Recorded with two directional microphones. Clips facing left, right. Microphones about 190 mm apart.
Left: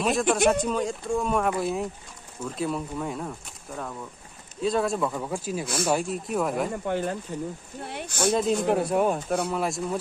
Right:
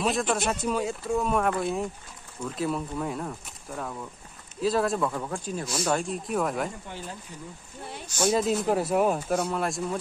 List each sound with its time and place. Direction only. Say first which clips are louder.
0.0 s speech: left 4 dB; centre (ahead or behind)
6.7 s speech: left 11 dB; 60° left (ahead or behind)
8.3 s speech: left 1 dB; centre (ahead or behind)